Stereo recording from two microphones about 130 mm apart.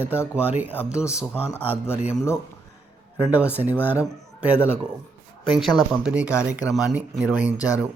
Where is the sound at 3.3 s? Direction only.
10° right (ahead or behind).